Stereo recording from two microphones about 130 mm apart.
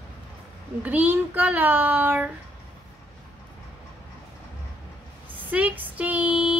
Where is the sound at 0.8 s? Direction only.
15° right (ahead or behind).